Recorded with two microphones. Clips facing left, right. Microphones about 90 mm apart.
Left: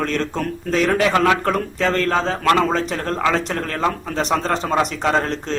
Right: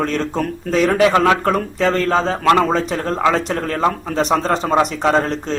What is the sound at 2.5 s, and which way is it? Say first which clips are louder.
Speech: right 3 dB; 20° right (ahead or behind).